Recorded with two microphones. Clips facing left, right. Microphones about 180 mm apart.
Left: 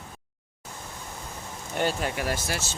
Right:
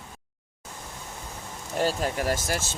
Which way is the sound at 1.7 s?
35° right (ahead or behind).